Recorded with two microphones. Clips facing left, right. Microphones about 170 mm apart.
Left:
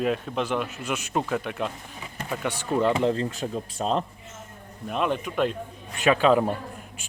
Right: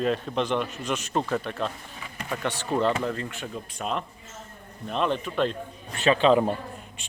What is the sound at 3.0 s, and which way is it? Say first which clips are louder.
Speech: left 6 dB; 30° left (ahead or behind).